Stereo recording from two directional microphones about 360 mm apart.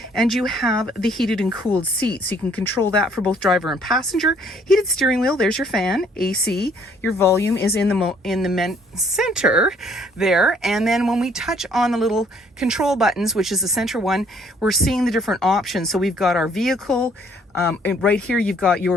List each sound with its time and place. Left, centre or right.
0.1 s speech: centre
6.4 s a woman's voice: left
7.2 s speech: centre
18.3 s speech: centre